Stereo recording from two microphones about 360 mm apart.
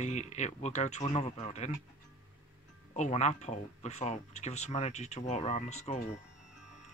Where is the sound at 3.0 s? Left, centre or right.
Centre.